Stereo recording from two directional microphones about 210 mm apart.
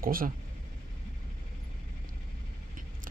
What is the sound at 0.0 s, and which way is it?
Speech, 40° right (ahead or behind).